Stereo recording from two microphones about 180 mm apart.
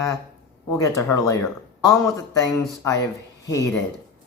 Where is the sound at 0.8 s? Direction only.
15° left (ahead or behind).